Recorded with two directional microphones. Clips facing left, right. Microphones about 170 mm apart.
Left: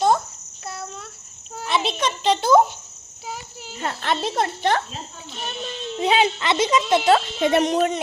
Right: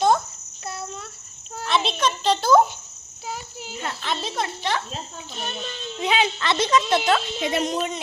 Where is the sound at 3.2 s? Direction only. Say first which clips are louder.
Right 1 dB; centre (ahead or behind).